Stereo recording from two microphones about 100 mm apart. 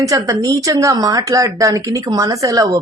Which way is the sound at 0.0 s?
35° right (ahead or behind).